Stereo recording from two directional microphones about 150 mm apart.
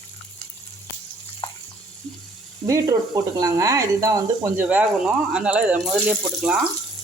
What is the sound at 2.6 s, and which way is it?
Speech, 20° right (ahead or behind).